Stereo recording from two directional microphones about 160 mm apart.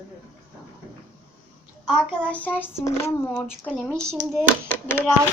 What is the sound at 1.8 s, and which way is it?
Speech, centre (ahead or behind).